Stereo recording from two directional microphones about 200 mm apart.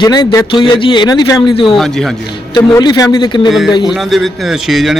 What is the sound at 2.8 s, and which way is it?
A man's voice, 20° left (ahead or behind).